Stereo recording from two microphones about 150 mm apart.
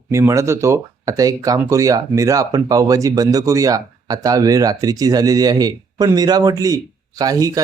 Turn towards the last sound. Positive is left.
turn(degrees=-20)  # may be behind; listen again after turning